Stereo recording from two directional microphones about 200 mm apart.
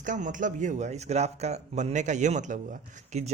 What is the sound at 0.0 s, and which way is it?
A man's voice, 40° right (ahead or behind).